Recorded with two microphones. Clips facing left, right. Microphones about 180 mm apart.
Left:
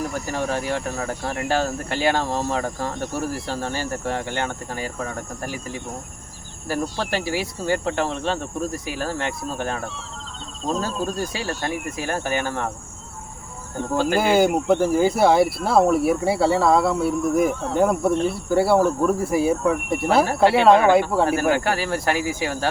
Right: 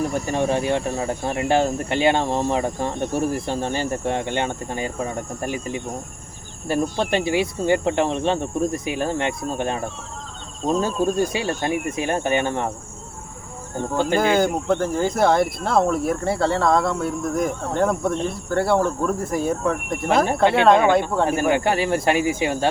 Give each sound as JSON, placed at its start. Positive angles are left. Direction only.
{"t": 0.1, "sound": "speech", "side_deg": -20}
{"t": 6.9, "sound": "speech", "side_deg": -20}
{"t": 13.9, "sound": "speech", "side_deg": -20}
{"t": 14.2, "sound": "speech", "side_deg": 10}
{"t": 21.5, "sound": "speech", "side_deg": -20}